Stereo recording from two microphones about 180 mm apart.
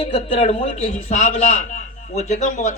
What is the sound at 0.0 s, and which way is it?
A man's voice, 35° left (ahead or behind).